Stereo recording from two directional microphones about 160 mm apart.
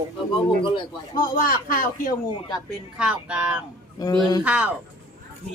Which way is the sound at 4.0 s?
25° left (ahead or behind).